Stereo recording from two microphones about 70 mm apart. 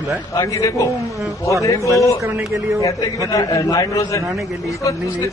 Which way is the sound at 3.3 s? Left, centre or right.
Left.